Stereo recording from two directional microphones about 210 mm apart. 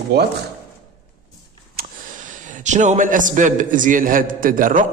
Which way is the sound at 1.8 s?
45° right (ahead or behind).